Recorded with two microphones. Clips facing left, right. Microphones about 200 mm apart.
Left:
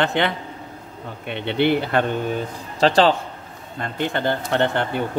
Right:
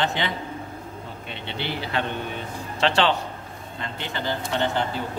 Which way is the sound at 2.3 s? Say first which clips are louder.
Left 5 dB; 35° left (ahead or behind).